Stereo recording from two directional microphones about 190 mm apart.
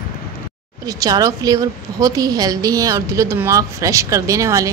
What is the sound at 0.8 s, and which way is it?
A woman's voice, 20° right (ahead or behind).